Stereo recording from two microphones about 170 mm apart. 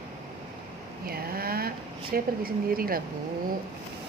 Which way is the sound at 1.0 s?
60° right (ahead or behind).